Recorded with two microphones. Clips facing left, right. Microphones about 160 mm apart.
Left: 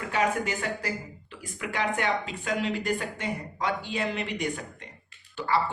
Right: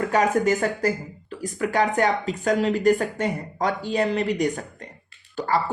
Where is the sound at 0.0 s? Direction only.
45° right (ahead or behind).